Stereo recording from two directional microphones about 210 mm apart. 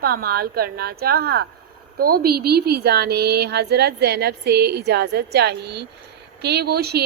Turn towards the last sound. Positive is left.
turn(degrees=-50)  # may be behind; listen again after turning